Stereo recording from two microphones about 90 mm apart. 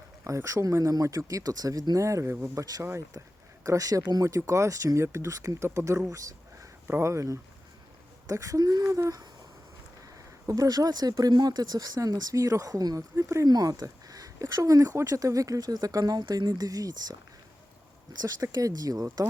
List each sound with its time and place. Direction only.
0.3 s speech: 35° right (ahead or behind)
2.8 s speech: 30° right (ahead or behind)
6.1 s a sound: 40° right (ahead or behind)
6.8 s speech: 25° right (ahead or behind)
10.4 s speech: 40° right (ahead or behind)
13.5 s a sound: 45° right (ahead or behind)
14.4 s speech: 40° right (ahead or behind)
16.5 s speech: 40° right (ahead or behind)
18.5 s speech: 45° right (ahead or behind)